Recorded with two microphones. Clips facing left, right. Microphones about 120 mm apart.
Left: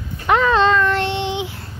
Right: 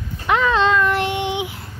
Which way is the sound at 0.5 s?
5° right (ahead or behind).